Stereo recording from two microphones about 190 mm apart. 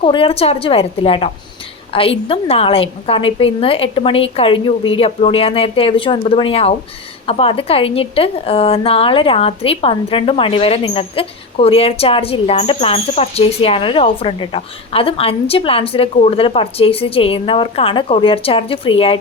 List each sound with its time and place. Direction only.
0.0 s a woman's voice: 25° left (ahead or behind)